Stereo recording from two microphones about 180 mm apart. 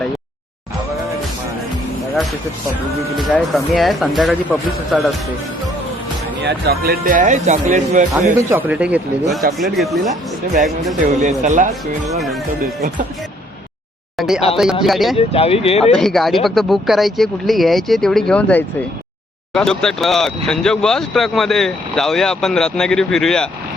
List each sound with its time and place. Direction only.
3.2 s speech: centre (ahead or behind)
6.4 s speech: 65° right (ahead or behind); by 8.0 s 40° right (ahead or behind)
8.4 s speech: 15° right (ahead or behind)
11.2 s speech: 45° right (ahead or behind)
14.2 s a sound: centre (ahead or behind)
14.5 s speech: 5° right (ahead or behind)
15.1 s speech: 35° left (ahead or behind)
16.0 s speech: centre (ahead or behind)